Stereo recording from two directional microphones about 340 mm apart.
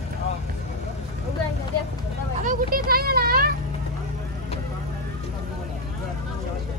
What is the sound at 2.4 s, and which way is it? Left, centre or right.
A child's voice, right.